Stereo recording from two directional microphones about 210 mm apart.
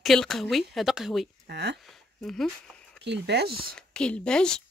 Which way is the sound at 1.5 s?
50° right (ahead or behind).